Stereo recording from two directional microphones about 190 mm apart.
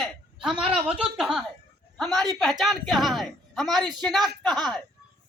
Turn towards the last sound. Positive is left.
turn(degrees=0)  # may be behind; listen again after turning